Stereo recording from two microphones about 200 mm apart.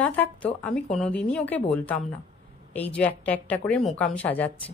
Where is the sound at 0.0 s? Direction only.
5° left (ahead or behind).